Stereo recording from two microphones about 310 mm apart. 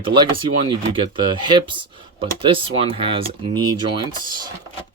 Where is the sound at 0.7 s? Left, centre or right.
Centre.